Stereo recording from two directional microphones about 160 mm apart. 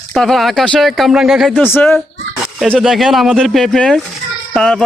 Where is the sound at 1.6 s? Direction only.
15° left (ahead or behind).